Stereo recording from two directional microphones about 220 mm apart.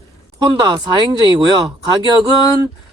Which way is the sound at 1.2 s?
20° right (ahead or behind).